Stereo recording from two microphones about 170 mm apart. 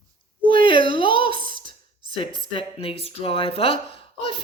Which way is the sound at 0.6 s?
30° left (ahead or behind).